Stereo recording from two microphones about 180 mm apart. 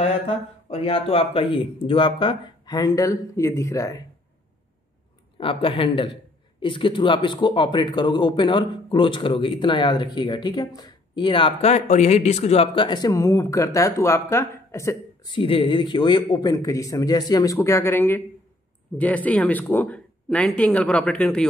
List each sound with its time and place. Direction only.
0.8 s speech: 30° left (ahead or behind)
5.4 s speech: 30° left (ahead or behind)
15.3 s speech: 30° left (ahead or behind); by 21.5 s 5° left (ahead or behind)